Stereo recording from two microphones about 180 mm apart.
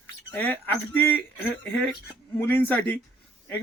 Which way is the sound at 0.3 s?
10° left (ahead or behind).